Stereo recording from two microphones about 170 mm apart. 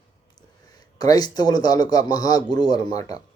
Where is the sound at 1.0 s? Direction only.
25° left (ahead or behind).